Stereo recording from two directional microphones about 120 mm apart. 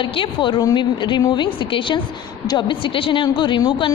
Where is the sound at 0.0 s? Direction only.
45° left (ahead or behind).